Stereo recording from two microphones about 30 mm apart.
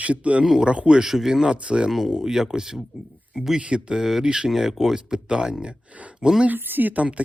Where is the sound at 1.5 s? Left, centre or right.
Right.